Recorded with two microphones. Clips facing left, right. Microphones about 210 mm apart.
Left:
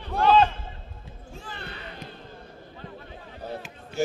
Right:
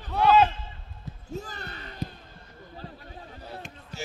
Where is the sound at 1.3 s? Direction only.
40° right (ahead or behind).